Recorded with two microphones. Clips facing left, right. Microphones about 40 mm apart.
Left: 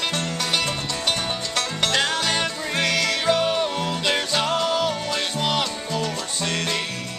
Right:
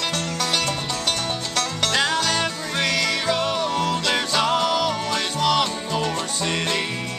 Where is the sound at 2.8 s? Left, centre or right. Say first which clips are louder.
Left 1 dB; centre.